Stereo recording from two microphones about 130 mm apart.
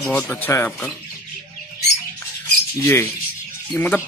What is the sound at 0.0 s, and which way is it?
Speech, 10° left (ahead or behind).